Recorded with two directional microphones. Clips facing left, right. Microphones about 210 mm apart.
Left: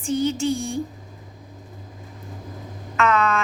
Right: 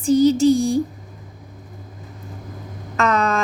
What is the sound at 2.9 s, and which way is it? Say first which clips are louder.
Speech: right 1 dB; 40° right (ahead or behind).